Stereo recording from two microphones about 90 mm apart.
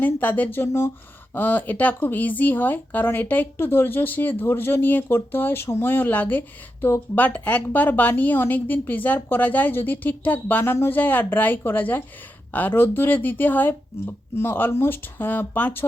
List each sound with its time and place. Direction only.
0.0 s speech: 20° left (ahead or behind)